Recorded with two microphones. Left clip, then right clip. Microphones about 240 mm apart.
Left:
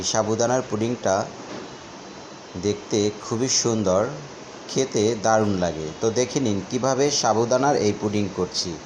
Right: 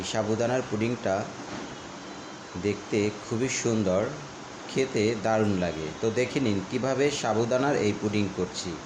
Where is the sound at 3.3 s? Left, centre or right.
Centre.